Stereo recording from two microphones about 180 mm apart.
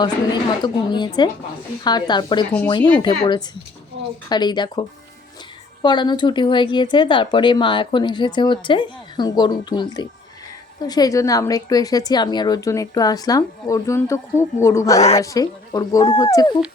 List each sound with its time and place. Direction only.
0.6 s speech: 25° left (ahead or behind)